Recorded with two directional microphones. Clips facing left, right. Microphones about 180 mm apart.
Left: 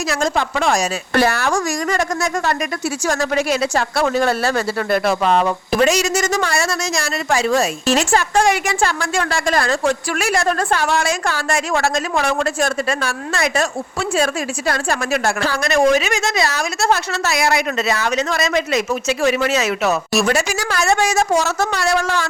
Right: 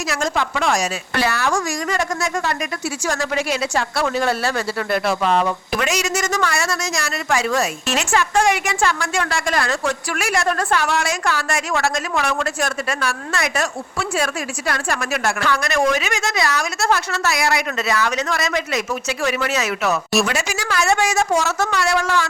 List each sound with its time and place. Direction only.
0.1 s a woman's voice: 35° left (ahead or behind)
14.7 s a woman's voice: 30° left (ahead or behind)
20.2 s speech: 40° left (ahead or behind)